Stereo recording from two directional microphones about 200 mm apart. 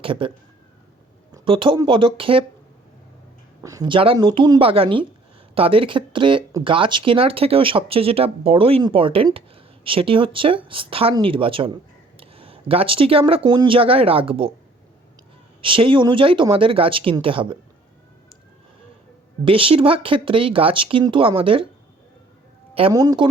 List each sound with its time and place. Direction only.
0.0 s speech: 25° right (ahead or behind)
3.6 s speech: 20° right (ahead or behind)
15.6 s speech: 25° right (ahead or behind)
19.5 s speech: 25° right (ahead or behind)
22.7 s speech: 20° right (ahead or behind)